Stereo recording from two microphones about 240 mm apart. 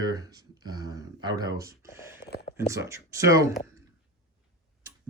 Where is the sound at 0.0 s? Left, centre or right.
Centre.